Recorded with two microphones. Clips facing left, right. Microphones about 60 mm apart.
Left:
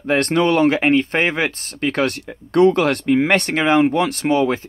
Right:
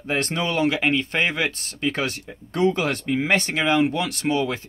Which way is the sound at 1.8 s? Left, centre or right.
Left.